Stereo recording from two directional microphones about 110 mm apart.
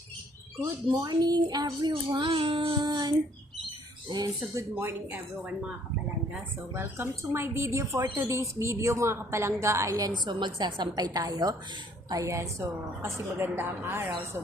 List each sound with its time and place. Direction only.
0.6 s a woman's voice: 40° right (ahead or behind)
1.9 s child singing: 50° right (ahead or behind)
4.5 s speech: 20° right (ahead or behind)
6.7 s a woman's voice: 20° right (ahead or behind)
10.1 s a woman's voice: 40° right (ahead or behind); by 14.1 s 20° right (ahead or behind)